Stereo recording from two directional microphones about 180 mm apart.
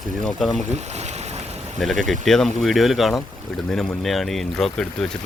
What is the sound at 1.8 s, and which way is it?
Speech, centre (ahead or behind).